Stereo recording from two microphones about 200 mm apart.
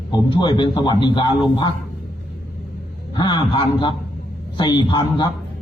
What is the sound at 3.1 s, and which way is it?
A man's voice, 20° left (ahead or behind).